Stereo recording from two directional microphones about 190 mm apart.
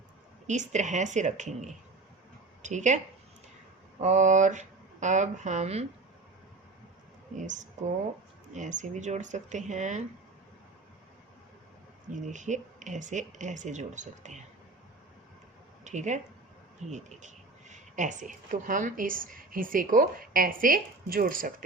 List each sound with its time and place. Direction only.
0.4 s speech: 40° right (ahead or behind)
4.0 s speech: 40° right (ahead or behind)
7.3 s speech: 40° right (ahead or behind)
12.1 s speech: 40° right (ahead or behind)
15.8 s a woman's voice: 40° right (ahead or behind)